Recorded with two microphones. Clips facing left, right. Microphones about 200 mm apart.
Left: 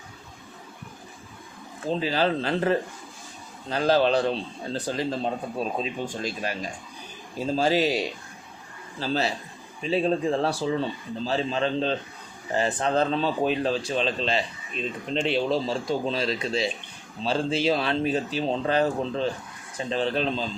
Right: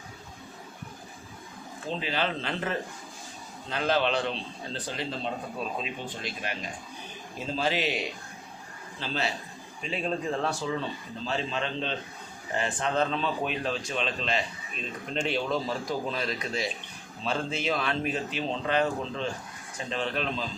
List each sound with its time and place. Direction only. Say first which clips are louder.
1.9 s speech: left 6 dB; 35° left (ahead or behind)